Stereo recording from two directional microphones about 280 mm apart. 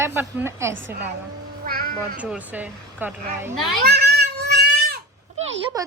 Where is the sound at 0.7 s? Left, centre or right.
Right.